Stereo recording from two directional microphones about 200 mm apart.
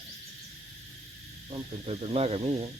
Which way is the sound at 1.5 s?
30° right (ahead or behind).